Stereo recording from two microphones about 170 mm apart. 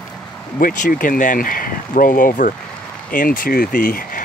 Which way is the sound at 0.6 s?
50° left (ahead or behind).